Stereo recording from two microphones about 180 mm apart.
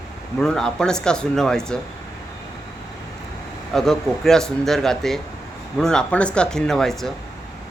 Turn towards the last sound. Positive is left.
turn(degrees=0)  # may be behind; listen again after turning